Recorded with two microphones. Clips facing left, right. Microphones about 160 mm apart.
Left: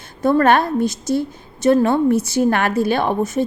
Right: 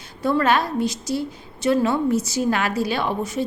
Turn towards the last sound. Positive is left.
turn(degrees=50)  # may be behind; listen again after turning